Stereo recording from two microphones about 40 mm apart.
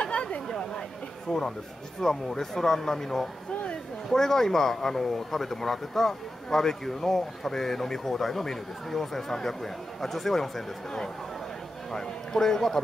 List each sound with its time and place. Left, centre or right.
0.0 s chatter: left
1.3 s speech: centre